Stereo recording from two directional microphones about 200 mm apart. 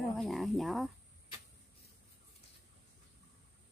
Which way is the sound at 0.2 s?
Centre (ahead or behind).